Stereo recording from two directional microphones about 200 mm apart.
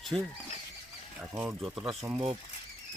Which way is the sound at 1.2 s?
10° right (ahead or behind).